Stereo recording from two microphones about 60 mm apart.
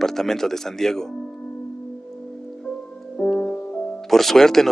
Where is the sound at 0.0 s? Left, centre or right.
Centre.